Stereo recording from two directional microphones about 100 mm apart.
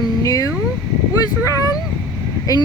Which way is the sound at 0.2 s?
35° left (ahead or behind).